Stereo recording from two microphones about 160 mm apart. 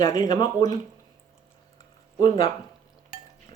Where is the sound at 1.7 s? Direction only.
25° left (ahead or behind).